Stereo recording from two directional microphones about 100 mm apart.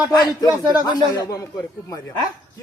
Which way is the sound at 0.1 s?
40° left (ahead or behind).